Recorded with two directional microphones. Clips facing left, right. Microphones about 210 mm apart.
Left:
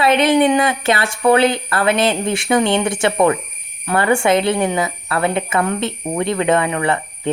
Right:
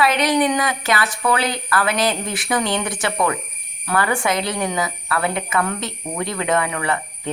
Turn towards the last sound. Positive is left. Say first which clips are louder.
# left 4 dB
turn(degrees=25)  # may be behind; listen again after turning